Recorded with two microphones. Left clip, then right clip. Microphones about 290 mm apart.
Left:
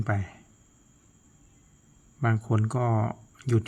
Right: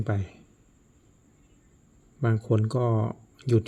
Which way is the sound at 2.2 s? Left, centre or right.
Centre.